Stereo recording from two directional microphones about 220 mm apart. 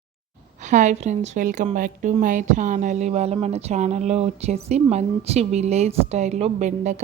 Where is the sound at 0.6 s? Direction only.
35° right (ahead or behind).